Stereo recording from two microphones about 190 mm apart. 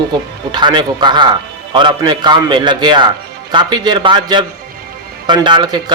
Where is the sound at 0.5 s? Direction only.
25° right (ahead or behind).